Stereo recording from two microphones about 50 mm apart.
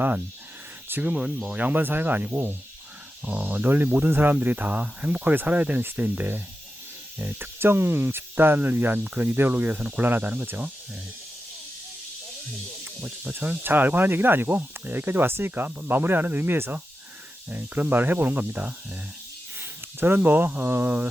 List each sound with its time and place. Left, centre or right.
0.9 s snake: right
1.1 s speech: right
1.5 s speech: right
3.5 s speech: right
13.3 s speech: right
19.5 s speech: right